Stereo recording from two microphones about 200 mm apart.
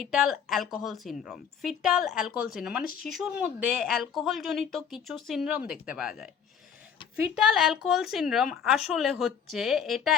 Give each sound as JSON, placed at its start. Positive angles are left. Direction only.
{"t": 0.0, "sound": "speech", "side_deg": 0}
{"t": 2.8, "sound": "speech", "side_deg": 45}
{"t": 3.1, "sound": "speech", "side_deg": -5}
{"t": 7.3, "sound": "speech", "side_deg": -5}